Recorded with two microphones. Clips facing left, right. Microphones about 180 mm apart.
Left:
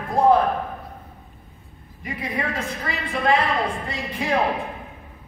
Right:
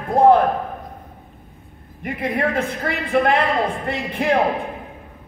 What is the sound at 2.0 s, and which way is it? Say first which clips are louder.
A man's voice: right 6 dB; 55° right (ahead or behind).